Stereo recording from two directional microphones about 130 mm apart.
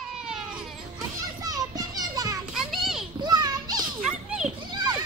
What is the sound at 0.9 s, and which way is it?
Children playing, 30° right (ahead or behind).